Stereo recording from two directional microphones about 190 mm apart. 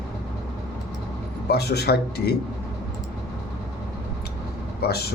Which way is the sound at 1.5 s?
60° left (ahead or behind).